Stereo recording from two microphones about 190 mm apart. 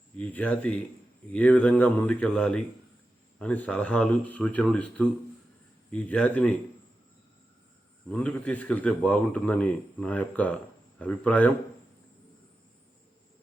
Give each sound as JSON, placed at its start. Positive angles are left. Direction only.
{"t": 0.2, "sound": "a man's voice", "side_deg": 10}
{"t": 8.1, "sound": "a man's voice", "side_deg": 5}